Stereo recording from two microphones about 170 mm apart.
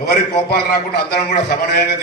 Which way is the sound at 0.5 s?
65° left (ahead or behind).